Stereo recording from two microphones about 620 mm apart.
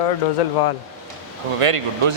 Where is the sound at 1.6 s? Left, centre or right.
Right.